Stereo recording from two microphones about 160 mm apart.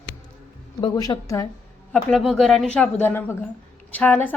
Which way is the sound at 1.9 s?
5° left (ahead or behind).